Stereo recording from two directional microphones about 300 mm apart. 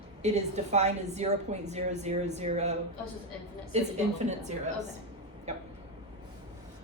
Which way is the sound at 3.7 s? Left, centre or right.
Right.